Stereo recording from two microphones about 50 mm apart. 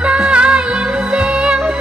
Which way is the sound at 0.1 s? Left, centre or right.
Right.